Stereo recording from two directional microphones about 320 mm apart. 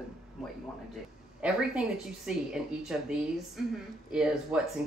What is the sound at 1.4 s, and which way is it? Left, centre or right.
Speech, centre.